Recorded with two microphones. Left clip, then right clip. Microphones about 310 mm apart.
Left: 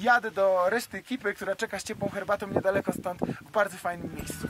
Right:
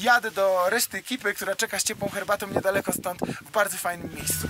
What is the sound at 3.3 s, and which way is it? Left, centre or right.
Speech, centre.